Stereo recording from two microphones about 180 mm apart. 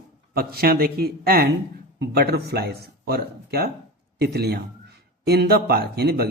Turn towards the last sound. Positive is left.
turn(degrees=-65)  # may be behind; listen again after turning